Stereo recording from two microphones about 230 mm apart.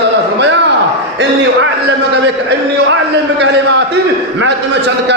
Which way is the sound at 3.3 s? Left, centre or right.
Right.